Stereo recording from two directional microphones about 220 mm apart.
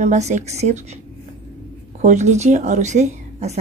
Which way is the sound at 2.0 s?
35° right (ahead or behind).